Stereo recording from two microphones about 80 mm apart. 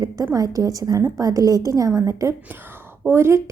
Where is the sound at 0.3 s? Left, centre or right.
Right.